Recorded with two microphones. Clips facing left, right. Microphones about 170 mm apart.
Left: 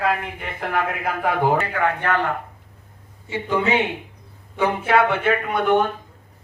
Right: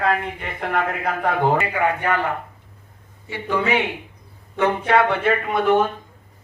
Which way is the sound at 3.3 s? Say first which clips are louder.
Left 1 dB; 15° left (ahead or behind).